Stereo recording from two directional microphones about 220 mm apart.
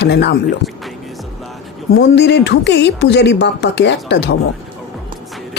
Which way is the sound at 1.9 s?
50° left (ahead or behind).